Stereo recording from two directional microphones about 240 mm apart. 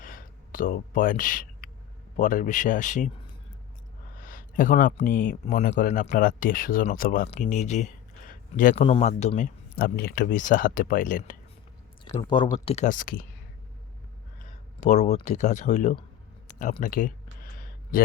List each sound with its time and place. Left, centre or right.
0.0 s a sound: left
2.1 s speech: left
4.2 s speech: left
12.1 s speech: centre; by 13.2 s left
14.4 s speech: left
16.5 s a sound: left